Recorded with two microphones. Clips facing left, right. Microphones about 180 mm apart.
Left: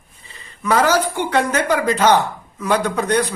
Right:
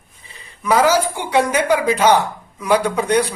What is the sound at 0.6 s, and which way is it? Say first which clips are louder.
Speech: right 1 dB; 10° right (ahead or behind).